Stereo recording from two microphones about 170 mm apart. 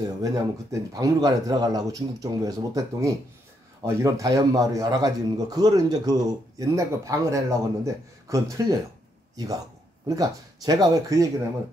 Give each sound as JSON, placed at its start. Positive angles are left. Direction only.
{"t": 0.2, "sound": "a man's voice", "side_deg": -20}
{"t": 10.0, "sound": "a man's voice", "side_deg": -20}